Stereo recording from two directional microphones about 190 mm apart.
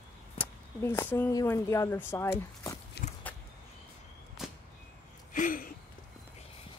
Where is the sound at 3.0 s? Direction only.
60° left (ahead or behind).